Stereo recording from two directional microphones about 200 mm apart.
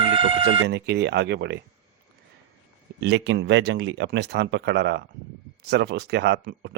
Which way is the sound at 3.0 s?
60° right (ahead or behind).